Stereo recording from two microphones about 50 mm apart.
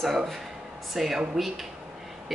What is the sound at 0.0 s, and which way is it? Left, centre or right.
Speech, centre.